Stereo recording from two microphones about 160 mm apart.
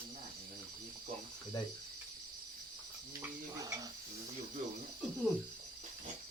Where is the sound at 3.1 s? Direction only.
20° right (ahead or behind).